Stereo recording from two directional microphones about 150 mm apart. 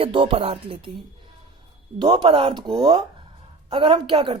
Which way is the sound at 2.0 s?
35° right (ahead or behind).